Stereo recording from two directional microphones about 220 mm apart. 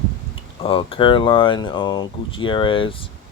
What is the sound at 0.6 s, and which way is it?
Speech, 25° left (ahead or behind).